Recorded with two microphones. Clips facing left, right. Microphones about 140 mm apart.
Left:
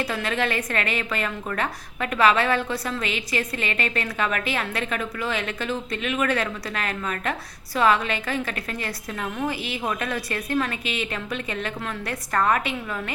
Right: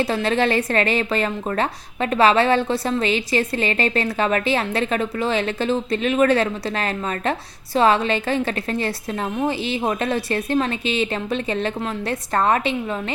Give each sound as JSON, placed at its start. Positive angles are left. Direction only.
{"t": 0.0, "sound": "speech", "side_deg": -30}